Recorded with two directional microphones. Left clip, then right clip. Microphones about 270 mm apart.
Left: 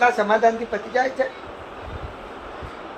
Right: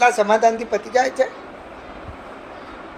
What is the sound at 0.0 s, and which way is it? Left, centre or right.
Speech, right.